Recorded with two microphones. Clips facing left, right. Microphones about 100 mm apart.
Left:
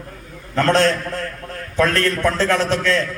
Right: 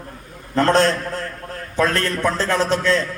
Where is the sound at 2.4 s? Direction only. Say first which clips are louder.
Even; 30° right (ahead or behind).